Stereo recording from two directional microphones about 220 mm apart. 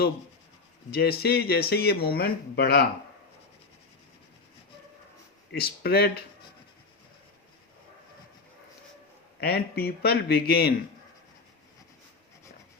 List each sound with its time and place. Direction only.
0.9 s speech: 45° left (ahead or behind)
5.5 s speech: 45° left (ahead or behind)
9.4 s speech: 45° left (ahead or behind)